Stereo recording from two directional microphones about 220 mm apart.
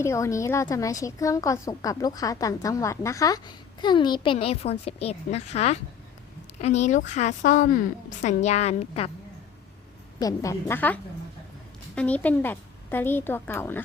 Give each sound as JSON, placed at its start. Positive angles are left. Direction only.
{"t": 0.0, "sound": "a woman's voice", "side_deg": 15}
{"t": 10.2, "sound": "a woman's voice", "side_deg": 15}